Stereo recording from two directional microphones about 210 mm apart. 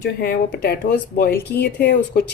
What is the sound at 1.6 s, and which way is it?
Speech, 50° left (ahead or behind).